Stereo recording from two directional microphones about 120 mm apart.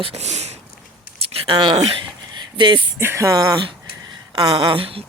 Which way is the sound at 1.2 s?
50° right (ahead or behind).